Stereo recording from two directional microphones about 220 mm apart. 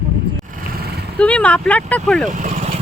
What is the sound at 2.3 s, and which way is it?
Speech, 35° right (ahead or behind).